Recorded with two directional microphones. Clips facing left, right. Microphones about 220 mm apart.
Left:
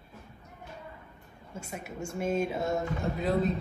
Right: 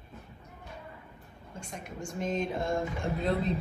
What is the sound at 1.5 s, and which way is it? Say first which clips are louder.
Speech: left 2 dB; 5° left (ahead or behind).